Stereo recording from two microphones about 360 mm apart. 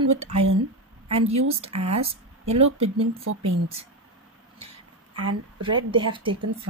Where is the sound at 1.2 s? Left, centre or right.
Centre.